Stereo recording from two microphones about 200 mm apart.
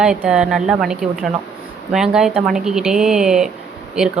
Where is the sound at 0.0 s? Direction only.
5° right (ahead or behind).